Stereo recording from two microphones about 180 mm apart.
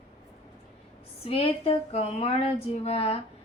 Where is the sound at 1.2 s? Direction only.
35° left (ahead or behind).